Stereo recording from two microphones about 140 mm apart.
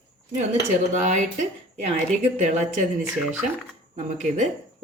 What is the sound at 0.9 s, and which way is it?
Speech, 60° right (ahead or behind).